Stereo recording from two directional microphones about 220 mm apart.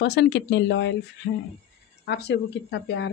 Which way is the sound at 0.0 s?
50° left (ahead or behind).